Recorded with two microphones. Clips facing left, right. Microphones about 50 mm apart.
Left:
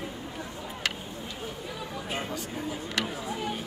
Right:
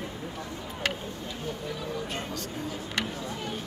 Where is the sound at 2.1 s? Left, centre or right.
Centre.